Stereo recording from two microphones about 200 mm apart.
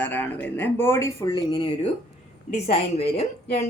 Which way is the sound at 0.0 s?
10° left (ahead or behind).